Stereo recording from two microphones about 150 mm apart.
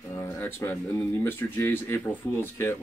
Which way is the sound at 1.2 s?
15° left (ahead or behind).